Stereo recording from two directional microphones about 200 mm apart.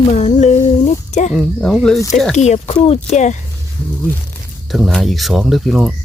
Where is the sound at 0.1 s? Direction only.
35° left (ahead or behind).